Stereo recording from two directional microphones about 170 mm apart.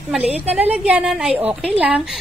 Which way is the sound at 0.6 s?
5° right (ahead or behind).